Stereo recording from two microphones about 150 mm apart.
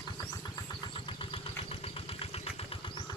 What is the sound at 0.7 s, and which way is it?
Vehicle, 35° left (ahead or behind).